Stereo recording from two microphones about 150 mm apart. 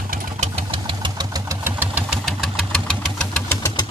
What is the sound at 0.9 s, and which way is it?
Engine, 30° right (ahead or behind).